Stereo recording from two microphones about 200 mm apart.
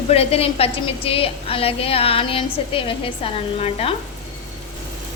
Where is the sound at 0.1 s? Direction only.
30° left (ahead or behind).